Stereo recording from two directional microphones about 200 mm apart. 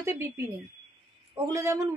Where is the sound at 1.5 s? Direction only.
15° right (ahead or behind).